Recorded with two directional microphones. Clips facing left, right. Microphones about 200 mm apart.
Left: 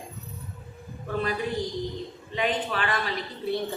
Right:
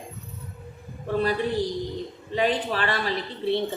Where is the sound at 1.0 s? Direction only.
35° right (ahead or behind).